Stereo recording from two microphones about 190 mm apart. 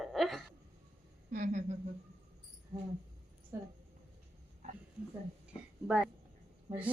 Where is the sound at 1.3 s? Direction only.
40° right (ahead or behind).